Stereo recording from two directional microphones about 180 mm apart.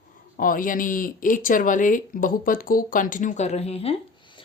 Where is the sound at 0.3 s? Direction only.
50° left (ahead or behind).